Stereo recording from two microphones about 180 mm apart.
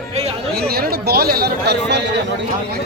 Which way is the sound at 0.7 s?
60° right (ahead or behind).